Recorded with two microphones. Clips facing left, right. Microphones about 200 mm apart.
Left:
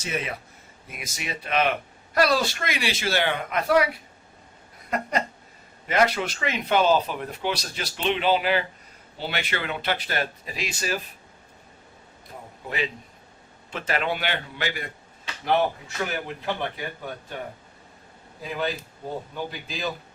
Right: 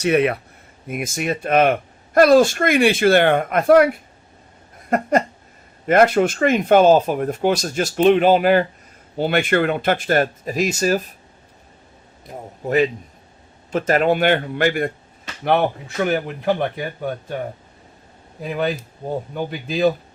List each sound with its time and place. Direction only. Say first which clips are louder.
0.0 s speech: right 14 dB; 65° right (ahead or behind)
0.9 s speech: right 12 dB; 50° right (ahead or behind)
12.6 s speech: right 12 dB; 45° right (ahead or behind)
18.4 s speech: right 6 dB; 55° right (ahead or behind)